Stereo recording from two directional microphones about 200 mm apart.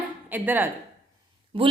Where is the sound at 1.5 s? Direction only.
25° right (ahead or behind).